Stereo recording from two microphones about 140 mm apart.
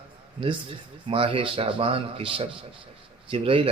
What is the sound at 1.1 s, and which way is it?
A man's voice, 40° right (ahead or behind).